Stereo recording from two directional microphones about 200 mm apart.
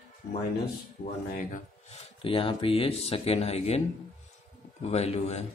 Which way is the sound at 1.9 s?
25° left (ahead or behind).